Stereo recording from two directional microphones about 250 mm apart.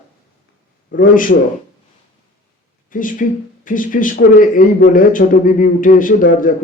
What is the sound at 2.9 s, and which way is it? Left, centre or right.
Speech, left.